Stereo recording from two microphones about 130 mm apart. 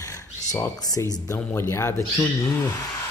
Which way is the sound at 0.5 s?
25° left (ahead or behind).